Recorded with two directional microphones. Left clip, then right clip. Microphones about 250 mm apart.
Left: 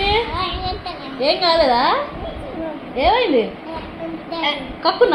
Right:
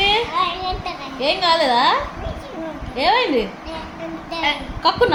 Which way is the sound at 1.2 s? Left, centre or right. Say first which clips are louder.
Left 2 dB; right.